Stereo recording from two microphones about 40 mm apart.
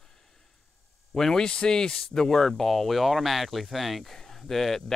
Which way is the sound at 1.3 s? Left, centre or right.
Left.